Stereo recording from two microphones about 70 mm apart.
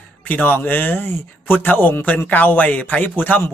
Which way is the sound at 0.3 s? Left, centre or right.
Left.